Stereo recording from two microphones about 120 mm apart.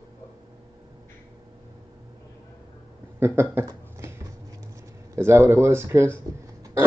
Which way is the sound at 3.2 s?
20° right (ahead or behind).